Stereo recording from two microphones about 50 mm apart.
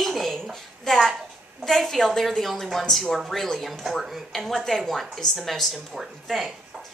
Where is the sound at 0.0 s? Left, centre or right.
Centre.